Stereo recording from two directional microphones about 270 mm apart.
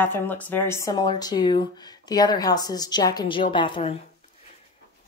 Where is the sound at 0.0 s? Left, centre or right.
Centre.